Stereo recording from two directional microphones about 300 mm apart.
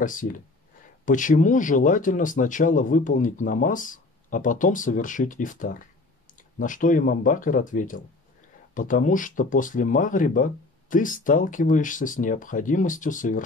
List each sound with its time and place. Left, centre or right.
0.0 s speech: left